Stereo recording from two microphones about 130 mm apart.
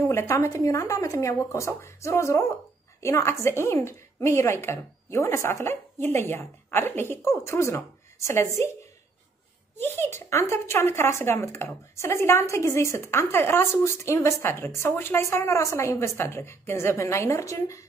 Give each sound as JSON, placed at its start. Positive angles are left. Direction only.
{"t": 0.1, "sound": "speech", "side_deg": 20}
{"t": 9.8, "sound": "speech", "side_deg": 20}